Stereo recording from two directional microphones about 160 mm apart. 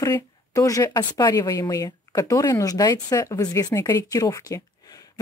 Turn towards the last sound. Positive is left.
turn(degrees=25)  # may be behind; listen again after turning